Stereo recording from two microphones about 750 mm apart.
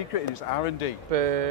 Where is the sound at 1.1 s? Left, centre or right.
Right.